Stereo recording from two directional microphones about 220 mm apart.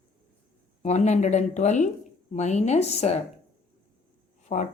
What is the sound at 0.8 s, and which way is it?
Speech, 30° left (ahead or behind).